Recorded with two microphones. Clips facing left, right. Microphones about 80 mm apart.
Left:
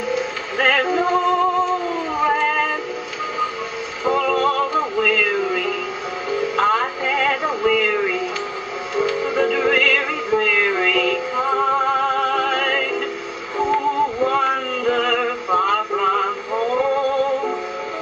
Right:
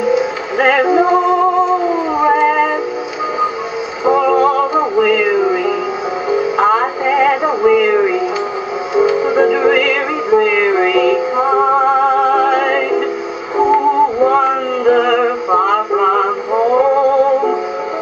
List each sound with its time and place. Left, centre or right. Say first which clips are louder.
0.0 s music: right 9 dB; centre
4.0 s music: right 7 dB; centre
14.2 s male singing: right 7 dB; centre
16.8 s music: right 8 dB; centre